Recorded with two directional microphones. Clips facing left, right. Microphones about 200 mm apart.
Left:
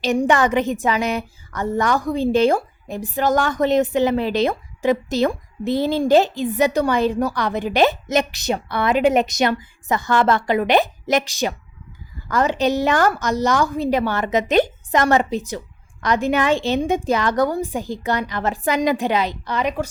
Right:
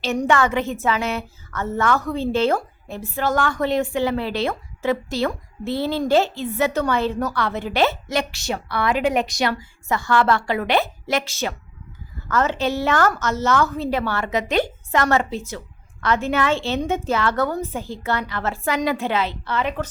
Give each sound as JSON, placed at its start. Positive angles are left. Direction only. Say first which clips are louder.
{"t": 0.2, "sound": "a woman's voice", "louder": "left 1 dB", "side_deg": 15}